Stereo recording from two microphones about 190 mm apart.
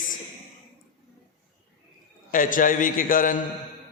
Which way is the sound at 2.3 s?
45° left (ahead or behind).